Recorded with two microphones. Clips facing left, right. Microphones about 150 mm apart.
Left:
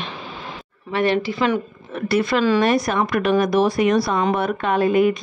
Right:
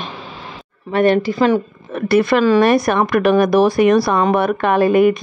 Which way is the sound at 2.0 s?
55° right (ahead or behind).